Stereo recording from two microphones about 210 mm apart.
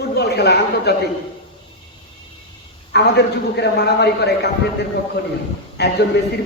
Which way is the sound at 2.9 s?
50° left (ahead or behind).